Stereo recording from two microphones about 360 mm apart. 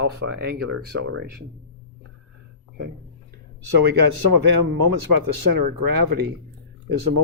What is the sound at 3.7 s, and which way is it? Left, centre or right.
Speech, right.